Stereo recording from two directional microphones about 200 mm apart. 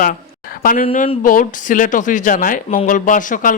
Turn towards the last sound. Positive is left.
turn(degrees=40)  # may be behind; listen again after turning